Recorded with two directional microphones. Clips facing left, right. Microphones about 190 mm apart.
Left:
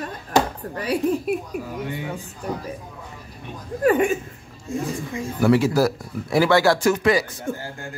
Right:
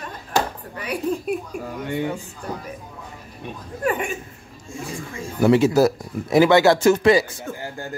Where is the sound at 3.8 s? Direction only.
40° left (ahead or behind).